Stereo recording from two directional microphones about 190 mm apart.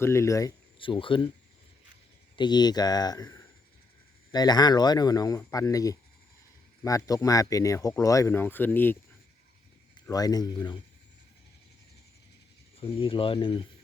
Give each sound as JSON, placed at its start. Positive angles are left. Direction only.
{"t": 0.0, "sound": "speech", "side_deg": 15}
{"t": 2.3, "sound": "speech", "side_deg": 25}
{"t": 10.1, "sound": "speech", "side_deg": 20}
{"t": 12.8, "sound": "speech", "side_deg": 30}